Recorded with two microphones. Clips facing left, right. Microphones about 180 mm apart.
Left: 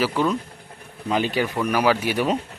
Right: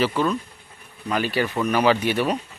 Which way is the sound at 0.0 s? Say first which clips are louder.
Even; 15° left (ahead or behind).